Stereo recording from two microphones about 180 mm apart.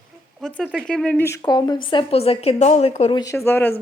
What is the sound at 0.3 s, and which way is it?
Speech, centre (ahead or behind).